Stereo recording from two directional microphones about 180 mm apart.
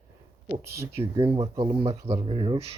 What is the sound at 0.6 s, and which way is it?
Speech, 15° right (ahead or behind).